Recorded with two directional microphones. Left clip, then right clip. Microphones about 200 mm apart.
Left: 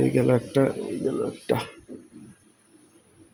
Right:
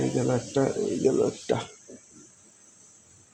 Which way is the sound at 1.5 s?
Centre (ahead or behind).